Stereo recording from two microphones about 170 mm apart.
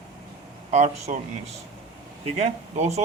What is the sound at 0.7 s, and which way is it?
Speech, 40° right (ahead or behind).